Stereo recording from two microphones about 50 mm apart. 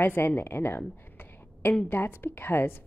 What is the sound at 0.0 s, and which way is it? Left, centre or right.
Speech, left.